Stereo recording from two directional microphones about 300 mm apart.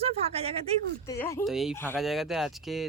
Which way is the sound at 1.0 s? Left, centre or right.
Centre.